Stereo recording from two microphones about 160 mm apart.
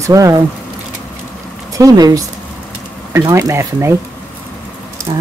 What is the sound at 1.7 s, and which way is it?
Speech, 20° right (ahead or behind).